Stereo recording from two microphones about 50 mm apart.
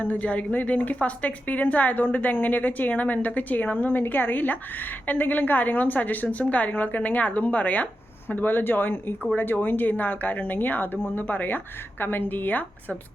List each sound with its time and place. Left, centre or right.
0.0 s a woman's voice: left